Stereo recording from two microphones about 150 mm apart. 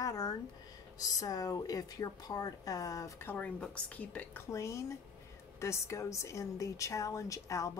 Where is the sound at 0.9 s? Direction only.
25° left (ahead or behind).